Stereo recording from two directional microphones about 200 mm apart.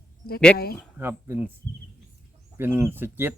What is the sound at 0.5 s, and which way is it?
Speech, 50° left (ahead or behind).